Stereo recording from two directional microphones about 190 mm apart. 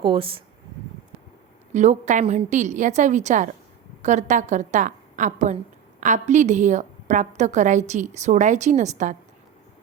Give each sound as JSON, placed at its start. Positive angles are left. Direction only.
{"t": 0.0, "sound": "speech", "side_deg": -25}
{"t": 1.7, "sound": "a woman's voice", "side_deg": -40}